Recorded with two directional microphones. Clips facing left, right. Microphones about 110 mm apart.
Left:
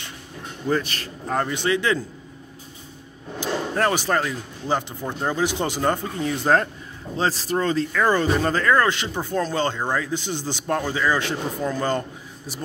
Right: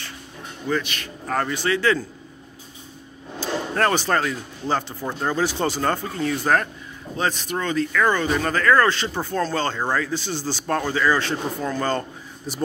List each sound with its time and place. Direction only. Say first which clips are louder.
0.7 s a man's voice: left 1 dB; 35° left (ahead or behind)
1.2 s speech: even; 20° left (ahead or behind)
3.3 s speech: even; 10° left (ahead or behind)
12.5 s speech: right 4 dB; 5° left (ahead or behind)